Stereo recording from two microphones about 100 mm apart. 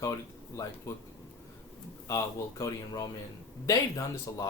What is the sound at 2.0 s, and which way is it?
Speech, 35° left (ahead or behind).